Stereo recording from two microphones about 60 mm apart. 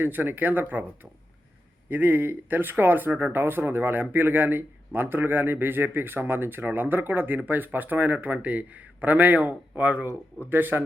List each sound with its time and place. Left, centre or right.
0.0 s speech: right
1.9 s speech: right